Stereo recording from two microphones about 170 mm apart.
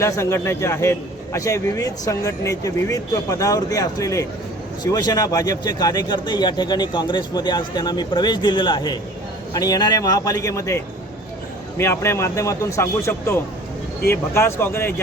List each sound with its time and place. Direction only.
0.0 s a man's voice: 15° left (ahead or behind)